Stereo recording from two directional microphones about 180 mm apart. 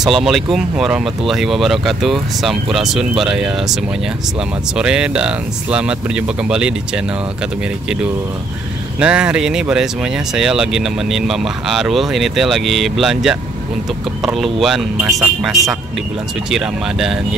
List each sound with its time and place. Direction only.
0.0 s speech: centre (ahead or behind)
4.7 s speech: 5° right (ahead or behind)
9.0 s speech: 5° right (ahead or behind)
15.0 s speech: 20° right (ahead or behind)
16.4 s speech: 5° right (ahead or behind)